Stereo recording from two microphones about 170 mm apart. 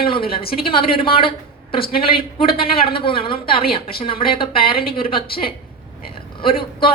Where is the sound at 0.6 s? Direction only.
30° left (ahead or behind).